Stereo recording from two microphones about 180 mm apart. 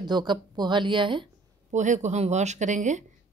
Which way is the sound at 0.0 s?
25° right (ahead or behind).